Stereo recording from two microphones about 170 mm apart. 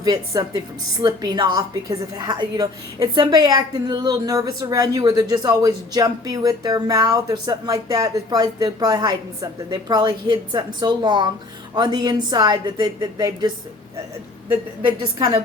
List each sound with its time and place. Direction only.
0.0 s a woman's voice: 20° right (ahead or behind)